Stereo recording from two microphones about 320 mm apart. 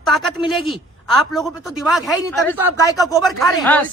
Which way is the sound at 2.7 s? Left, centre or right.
Centre.